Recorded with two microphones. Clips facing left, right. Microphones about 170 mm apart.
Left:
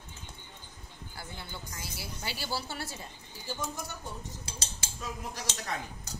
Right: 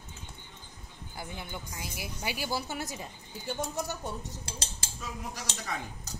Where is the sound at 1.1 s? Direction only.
15° right (ahead or behind).